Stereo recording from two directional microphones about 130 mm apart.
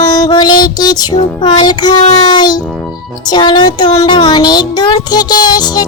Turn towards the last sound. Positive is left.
turn(degrees=30)  # may be behind; listen again after turning